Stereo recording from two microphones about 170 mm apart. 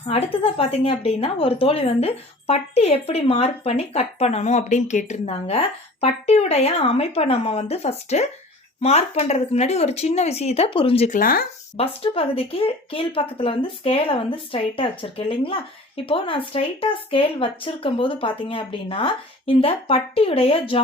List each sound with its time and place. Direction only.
0.1 s a woman's voice: 35° left (ahead or behind)
11.1 s speech: 55° left (ahead or behind)
11.8 s a woman's voice: 35° left (ahead or behind)